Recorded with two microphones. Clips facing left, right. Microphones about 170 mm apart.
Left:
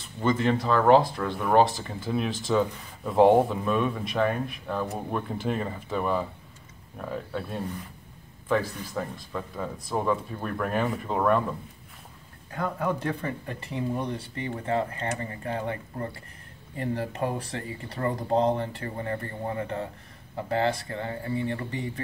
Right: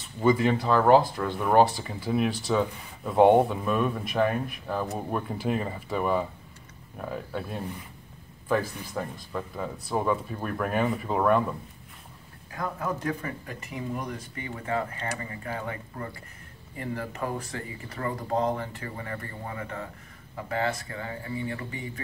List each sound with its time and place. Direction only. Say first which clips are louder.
0.2 s speech: right 2 dB; 5° right (ahead or behind)
12.5 s speech: left 3 dB; 30° left (ahead or behind)